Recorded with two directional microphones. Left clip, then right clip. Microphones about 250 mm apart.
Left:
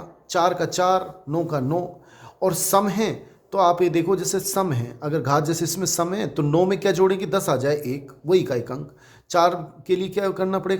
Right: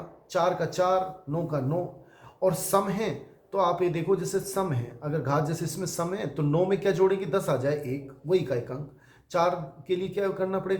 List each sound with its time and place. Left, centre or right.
0.3 s speech: left